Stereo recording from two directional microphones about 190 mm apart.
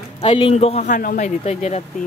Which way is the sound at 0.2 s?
30° left (ahead or behind).